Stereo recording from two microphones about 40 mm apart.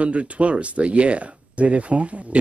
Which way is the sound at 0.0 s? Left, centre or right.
Right.